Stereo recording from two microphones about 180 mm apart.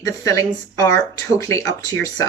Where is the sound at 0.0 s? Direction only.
20° left (ahead or behind).